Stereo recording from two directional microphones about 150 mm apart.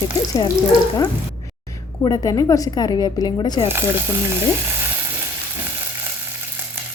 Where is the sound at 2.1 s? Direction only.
25° left (ahead or behind).